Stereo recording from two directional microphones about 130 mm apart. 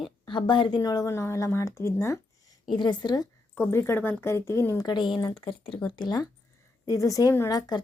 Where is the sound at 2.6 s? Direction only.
35° left (ahead or behind).